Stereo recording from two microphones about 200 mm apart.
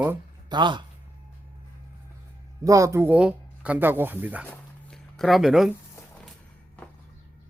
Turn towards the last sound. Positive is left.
turn(degrees=0)  # may be behind; listen again after turning